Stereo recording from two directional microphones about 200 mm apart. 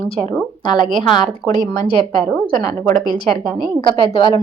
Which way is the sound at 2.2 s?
5° left (ahead or behind).